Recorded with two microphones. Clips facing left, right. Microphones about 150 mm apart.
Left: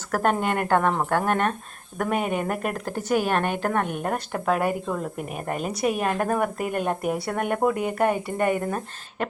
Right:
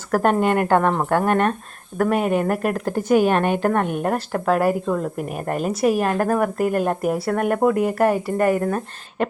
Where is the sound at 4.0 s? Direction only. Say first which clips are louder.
Right 5 dB; centre (ahead or behind).